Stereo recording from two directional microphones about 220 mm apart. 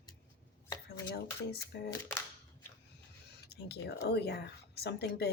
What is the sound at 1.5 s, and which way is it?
Speech, 50° left (ahead or behind).